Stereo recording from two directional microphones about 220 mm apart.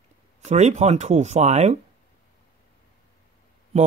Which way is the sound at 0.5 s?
30° right (ahead or behind).